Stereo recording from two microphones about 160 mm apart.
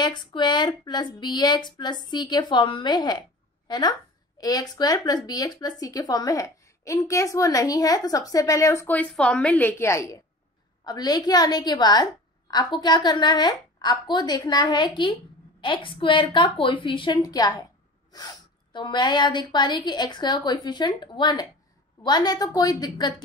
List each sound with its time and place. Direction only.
0.0 s a woman's voice: 25° left (ahead or behind)